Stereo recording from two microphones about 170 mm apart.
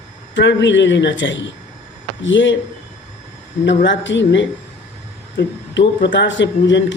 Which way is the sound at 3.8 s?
90° left.